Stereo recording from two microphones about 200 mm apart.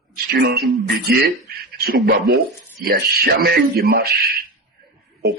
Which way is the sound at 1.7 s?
50° right (ahead or behind).